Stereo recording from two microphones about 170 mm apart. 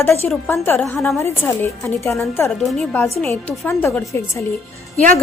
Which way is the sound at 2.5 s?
Centre (ahead or behind).